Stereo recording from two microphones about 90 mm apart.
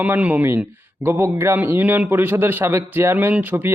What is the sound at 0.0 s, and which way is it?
A man's voice, 15° right (ahead or behind).